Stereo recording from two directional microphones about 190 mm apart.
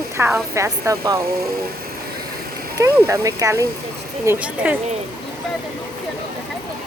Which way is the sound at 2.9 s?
10° right (ahead or behind).